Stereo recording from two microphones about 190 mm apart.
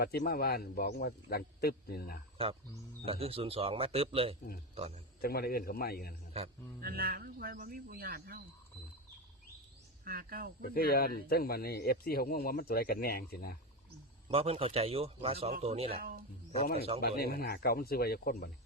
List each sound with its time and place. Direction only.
0.0 s a man's voice: 55° left (ahead or behind)
3.1 s a man's voice: 30° right (ahead or behind)
5.2 s speech: 55° left (ahead or behind)
6.8 s a man's voice: 50° right (ahead or behind)
10.0 s a man's voice: 50° right (ahead or behind)
10.8 s speech: 50° left (ahead or behind)
14.3 s a man's voice: 30° right (ahead or behind)
16.0 s a man's voice: 50° right (ahead or behind)
17.0 s speech: 55° left (ahead or behind)